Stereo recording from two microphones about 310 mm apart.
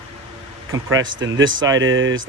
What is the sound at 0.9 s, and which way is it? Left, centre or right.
Speech, right.